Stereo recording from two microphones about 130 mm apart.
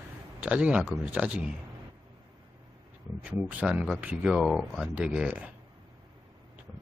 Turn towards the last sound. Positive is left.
turn(degrees=-10)  # may be behind; listen again after turning